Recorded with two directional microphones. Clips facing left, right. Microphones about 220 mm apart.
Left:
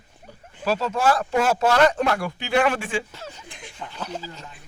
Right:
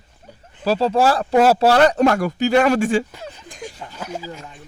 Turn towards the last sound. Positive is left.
turn(degrees=-10)  # may be behind; listen again after turning